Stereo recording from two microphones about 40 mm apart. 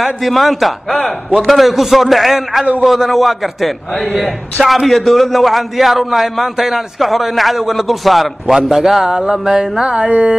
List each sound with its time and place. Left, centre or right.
0.0 s a man's voice: centre
9.2 s music: right
9.9 s speech: right